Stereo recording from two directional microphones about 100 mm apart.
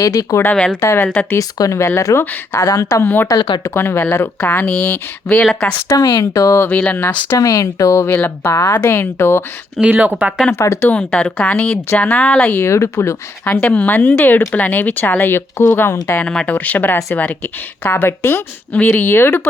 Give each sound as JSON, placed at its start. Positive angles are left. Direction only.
{"t": 0.0, "sound": "speech", "side_deg": 35}
{"t": 0.5, "sound": "speech", "side_deg": 10}
{"t": 0.8, "sound": "speech", "side_deg": 25}
{"t": 1.4, "sound": "speech", "side_deg": 35}
{"t": 5.9, "sound": "speech", "side_deg": 35}
{"t": 6.7, "sound": "speech", "side_deg": 15}
{"t": 7.3, "sound": "speech", "side_deg": 35}
{"t": 8.1, "sound": "speech", "side_deg": 20}
{"t": 9.9, "sound": "speech", "side_deg": -15}
{"t": 10.5, "sound": "speech", "side_deg": 25}
{"t": 10.9, "sound": "speech", "side_deg": 10}
{"t": 12.5, "sound": "speech", "side_deg": 25}
{"t": 13.5, "sound": "speech", "side_deg": 15}
{"t": 16.2, "sound": "speech", "side_deg": 10}